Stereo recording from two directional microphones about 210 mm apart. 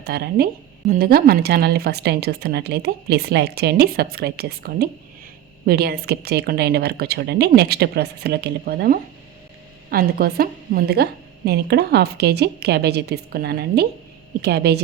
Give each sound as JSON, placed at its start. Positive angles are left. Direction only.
{"t": 0.0, "sound": "a woman's voice", "side_deg": -45}